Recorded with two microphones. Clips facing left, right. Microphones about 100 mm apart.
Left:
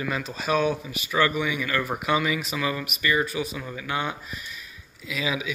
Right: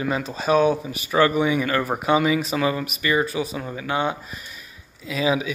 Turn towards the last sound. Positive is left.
turn(degrees=-35)  # may be behind; listen again after turning